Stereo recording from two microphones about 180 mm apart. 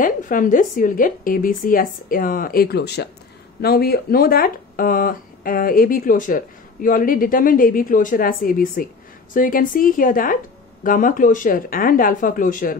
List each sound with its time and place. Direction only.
0.0 s speech: 50° left (ahead or behind)